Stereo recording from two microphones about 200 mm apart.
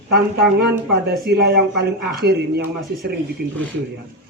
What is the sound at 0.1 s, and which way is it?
Speech, 55° right (ahead or behind).